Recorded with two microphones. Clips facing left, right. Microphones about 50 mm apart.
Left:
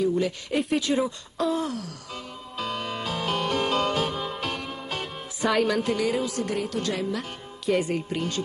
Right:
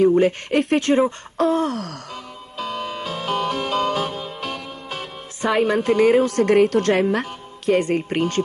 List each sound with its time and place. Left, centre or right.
0.0 s a woman's voice: right
2.5 s music: centre
5.5 s a woman's voice: right